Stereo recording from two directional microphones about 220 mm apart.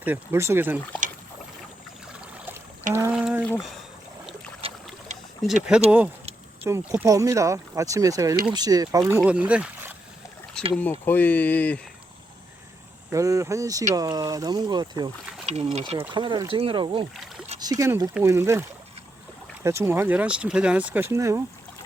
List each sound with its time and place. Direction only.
0.0 s speech: 10° right (ahead or behind)
2.9 s a sound: 10° right (ahead or behind)
4.6 s boat: 25° right (ahead or behind)
5.4 s speech: centre (ahead or behind)
6.7 s speech: 10° right (ahead or behind); by 11.8 s 5° left (ahead or behind)
13.1 s speech: 15° right (ahead or behind)
15.4 s speech: 30° right (ahead or behind); by 18.6 s 10° right (ahead or behind)
19.6 s speech: 10° right (ahead or behind)